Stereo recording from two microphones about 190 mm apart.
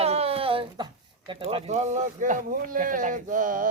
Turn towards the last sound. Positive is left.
turn(degrees=-45)  # may be behind; listen again after turning